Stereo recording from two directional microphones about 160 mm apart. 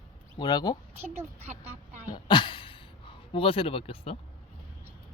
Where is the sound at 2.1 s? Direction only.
30° left (ahead or behind).